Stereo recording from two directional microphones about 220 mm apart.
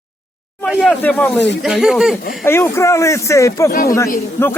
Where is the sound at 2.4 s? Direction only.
10° left (ahead or behind).